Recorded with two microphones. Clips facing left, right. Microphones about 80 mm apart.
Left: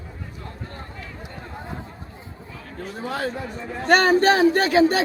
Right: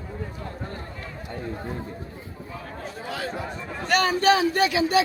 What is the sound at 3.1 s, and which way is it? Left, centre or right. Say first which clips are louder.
Speech: left 4 dB; left.